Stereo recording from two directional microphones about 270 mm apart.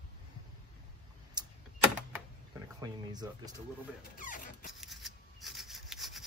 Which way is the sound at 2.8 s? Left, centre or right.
Centre.